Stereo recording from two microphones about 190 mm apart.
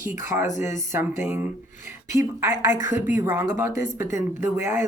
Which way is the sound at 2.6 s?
40° left (ahead or behind).